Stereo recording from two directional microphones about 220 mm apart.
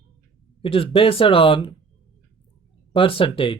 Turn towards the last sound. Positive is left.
turn(degrees=25)  # may be behind; listen again after turning